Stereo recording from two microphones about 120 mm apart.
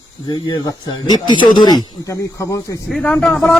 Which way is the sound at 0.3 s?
35° left (ahead or behind).